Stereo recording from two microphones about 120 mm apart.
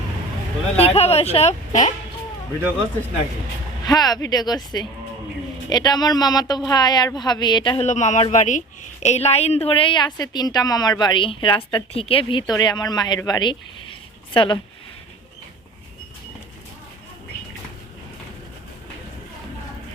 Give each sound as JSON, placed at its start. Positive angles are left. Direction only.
{"t": 0.8, "sound": "speech", "side_deg": 60}
{"t": 3.8, "sound": "a woman's voice", "side_deg": 35}
{"t": 7.8, "sound": "speech", "side_deg": 75}
{"t": 9.0, "sound": "a woman's voice", "side_deg": 65}